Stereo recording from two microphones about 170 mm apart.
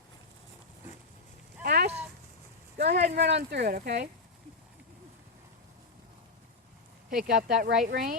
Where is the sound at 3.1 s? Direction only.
80° right.